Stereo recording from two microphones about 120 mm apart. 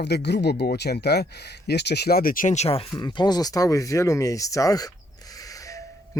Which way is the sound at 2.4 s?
90° left.